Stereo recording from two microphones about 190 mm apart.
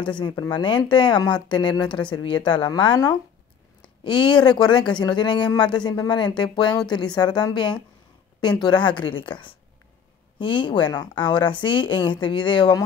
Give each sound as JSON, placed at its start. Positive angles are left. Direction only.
{"t": 0.0, "sound": "speech", "side_deg": 25}